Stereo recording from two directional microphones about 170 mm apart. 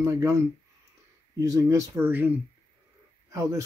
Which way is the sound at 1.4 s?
20° right (ahead or behind).